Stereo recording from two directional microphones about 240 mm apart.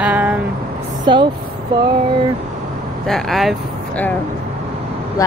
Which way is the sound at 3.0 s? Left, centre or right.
Centre.